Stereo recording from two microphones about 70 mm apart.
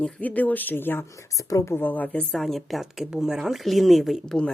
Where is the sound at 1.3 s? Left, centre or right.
Left.